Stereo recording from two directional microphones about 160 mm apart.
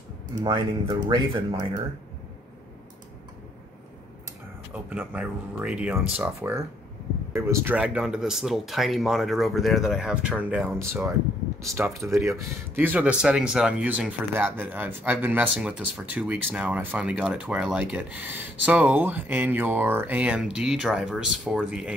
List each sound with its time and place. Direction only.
0.4 s speech: 30° right (ahead or behind)
4.7 s speech: 10° right (ahead or behind)